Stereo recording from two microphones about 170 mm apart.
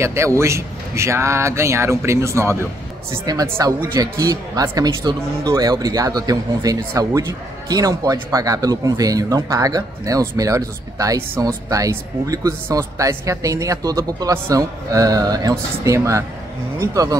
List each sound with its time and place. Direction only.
0.0 s speech: 15° right (ahead or behind)